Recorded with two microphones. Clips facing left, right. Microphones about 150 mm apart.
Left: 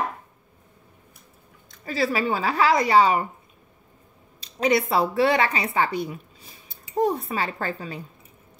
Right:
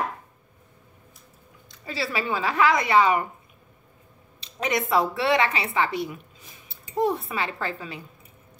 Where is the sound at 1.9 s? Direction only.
40° left (ahead or behind).